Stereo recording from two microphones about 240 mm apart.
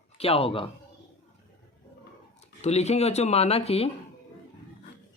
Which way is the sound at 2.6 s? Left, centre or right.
Left.